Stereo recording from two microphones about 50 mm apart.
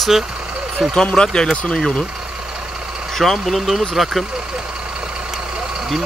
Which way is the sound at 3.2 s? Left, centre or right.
Centre.